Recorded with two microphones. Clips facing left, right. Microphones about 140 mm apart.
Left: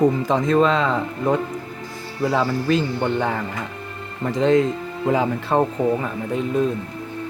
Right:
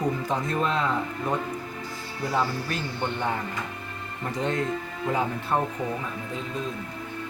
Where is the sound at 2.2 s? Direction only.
90° left.